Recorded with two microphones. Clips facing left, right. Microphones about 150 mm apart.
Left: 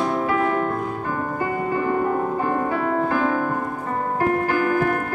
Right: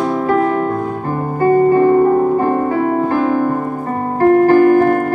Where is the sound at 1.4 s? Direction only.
50° right (ahead or behind).